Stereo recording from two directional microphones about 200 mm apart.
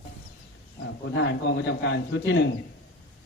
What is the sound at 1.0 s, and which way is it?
A man's voice, 60° left (ahead or behind).